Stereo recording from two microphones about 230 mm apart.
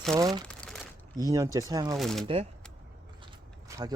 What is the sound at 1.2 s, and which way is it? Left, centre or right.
Speech, centre.